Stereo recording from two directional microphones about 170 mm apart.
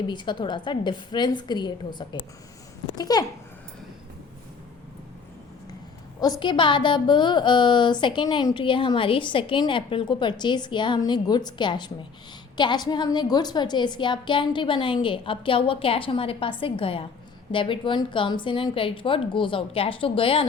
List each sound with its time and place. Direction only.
0.1 s a woman's voice: 25° left (ahead or behind)
6.1 s a woman's voice: 25° left (ahead or behind)